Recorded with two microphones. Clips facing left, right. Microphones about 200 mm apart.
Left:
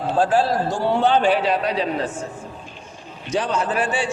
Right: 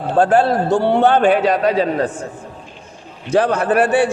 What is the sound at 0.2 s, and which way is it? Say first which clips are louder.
A man's voice: right 5 dB; 60° right (ahead or behind).